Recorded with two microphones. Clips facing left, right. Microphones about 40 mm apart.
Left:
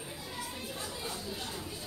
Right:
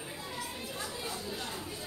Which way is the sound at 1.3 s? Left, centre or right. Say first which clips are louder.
Right 1 dB; right.